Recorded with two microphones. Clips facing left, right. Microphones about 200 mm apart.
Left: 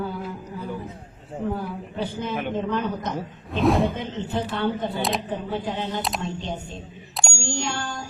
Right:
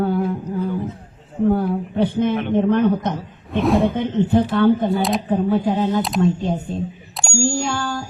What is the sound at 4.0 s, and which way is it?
A woman's voice, 55° right (ahead or behind).